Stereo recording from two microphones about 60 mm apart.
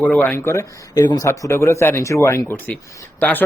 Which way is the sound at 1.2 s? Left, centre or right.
Left.